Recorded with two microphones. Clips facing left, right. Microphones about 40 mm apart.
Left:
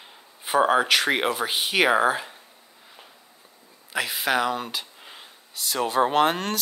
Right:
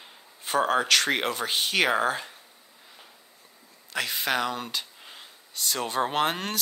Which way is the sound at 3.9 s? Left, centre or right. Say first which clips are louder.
Left 3 dB; centre.